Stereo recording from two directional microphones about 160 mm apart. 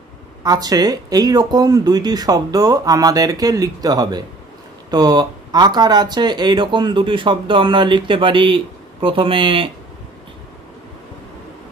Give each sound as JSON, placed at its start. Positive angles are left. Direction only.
{"t": 0.4, "sound": "speech", "side_deg": -25}